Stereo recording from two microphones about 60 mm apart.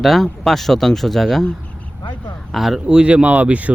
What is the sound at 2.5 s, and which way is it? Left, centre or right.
Speech, centre.